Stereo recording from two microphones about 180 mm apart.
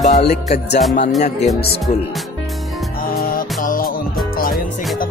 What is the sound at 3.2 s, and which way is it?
Music, 50° left (ahead or behind).